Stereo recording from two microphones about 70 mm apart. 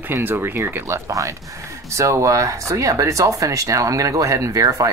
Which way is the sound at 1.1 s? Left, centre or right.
Right.